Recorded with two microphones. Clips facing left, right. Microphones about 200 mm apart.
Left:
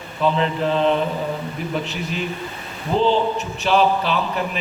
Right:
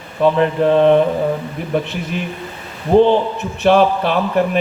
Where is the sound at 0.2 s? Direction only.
55° right (ahead or behind).